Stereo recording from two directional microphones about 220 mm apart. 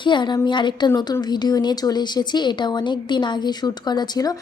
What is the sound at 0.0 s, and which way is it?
A woman's voice, 20° left (ahead or behind).